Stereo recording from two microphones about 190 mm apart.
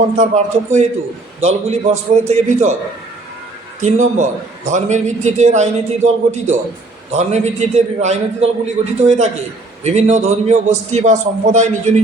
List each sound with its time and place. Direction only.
0.2 s a man's voice: 35° right (ahead or behind)
3.8 s a man's voice: 40° right (ahead or behind)